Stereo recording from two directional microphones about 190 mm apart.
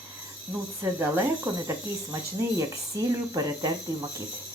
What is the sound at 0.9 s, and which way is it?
Speech, 10° right (ahead or behind).